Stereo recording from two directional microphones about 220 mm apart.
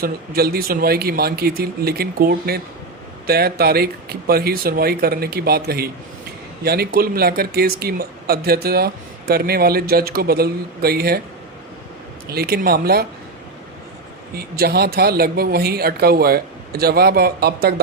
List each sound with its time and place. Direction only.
0.0 s speech: 45° right (ahead or behind)
12.3 s speech: 45° right (ahead or behind)
14.3 s speech: 45° right (ahead or behind)